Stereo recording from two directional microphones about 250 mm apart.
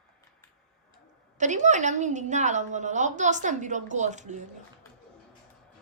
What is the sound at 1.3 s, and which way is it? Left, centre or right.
A woman's voice, right.